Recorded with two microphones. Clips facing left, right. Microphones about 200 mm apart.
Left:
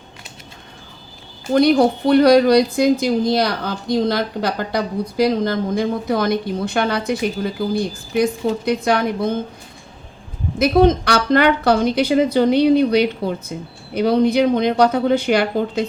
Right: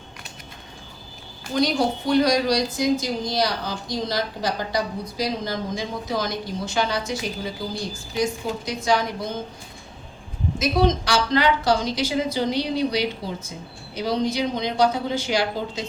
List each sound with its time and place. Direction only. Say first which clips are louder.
1.5 s a woman's voice: left 8 dB; 60° left (ahead or behind)
10.6 s a woman's voice: left 7 dB; 55° left (ahead or behind)